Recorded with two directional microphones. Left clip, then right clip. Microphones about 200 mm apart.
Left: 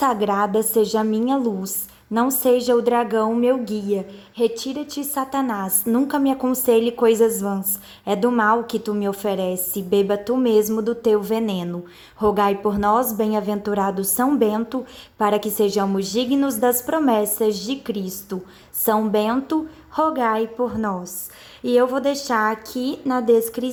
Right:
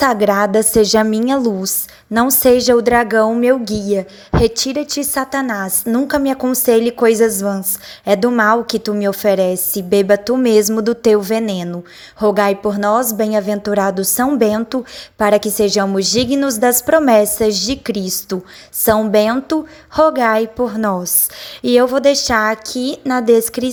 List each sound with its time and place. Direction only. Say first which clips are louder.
0.0 s a woman's voice: right 6 dB; 35° right (ahead or behind)